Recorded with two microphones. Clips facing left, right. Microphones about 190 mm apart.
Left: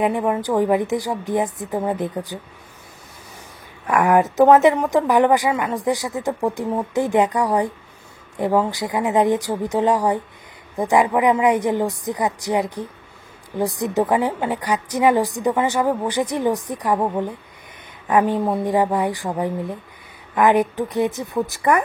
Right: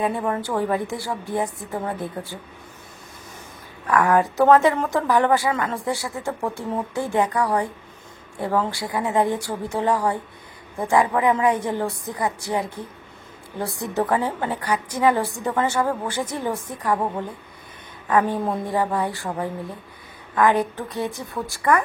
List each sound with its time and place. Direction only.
0.0 s a woman's voice: 15° left (ahead or behind)
3.8 s a woman's voice: 20° left (ahead or behind)